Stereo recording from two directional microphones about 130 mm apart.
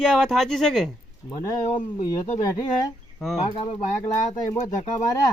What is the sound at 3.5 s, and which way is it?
Speech, 45° left (ahead or behind).